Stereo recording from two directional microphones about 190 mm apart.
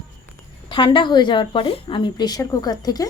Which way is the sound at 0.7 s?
25° left (ahead or behind).